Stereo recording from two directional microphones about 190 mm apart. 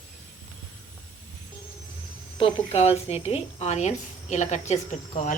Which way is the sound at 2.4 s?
35° left (ahead or behind).